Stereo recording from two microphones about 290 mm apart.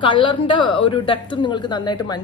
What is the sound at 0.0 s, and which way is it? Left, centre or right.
Speech, centre.